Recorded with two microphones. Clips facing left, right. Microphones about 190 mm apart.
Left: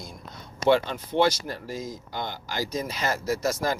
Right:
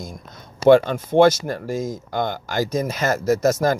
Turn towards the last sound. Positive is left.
turn(degrees=-45)  # may be behind; listen again after turning